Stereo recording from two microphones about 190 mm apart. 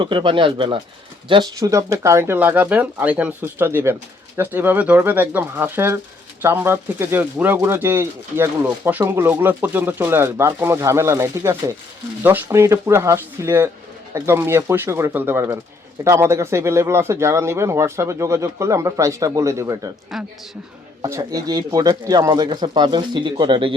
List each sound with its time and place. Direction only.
0.0 s a man's voice: 25° right (ahead or behind)
20.1 s a man's voice: centre (ahead or behind)
21.0 s a man's voice: 20° right (ahead or behind)